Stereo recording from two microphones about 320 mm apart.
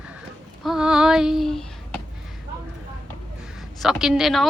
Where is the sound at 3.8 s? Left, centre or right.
Centre.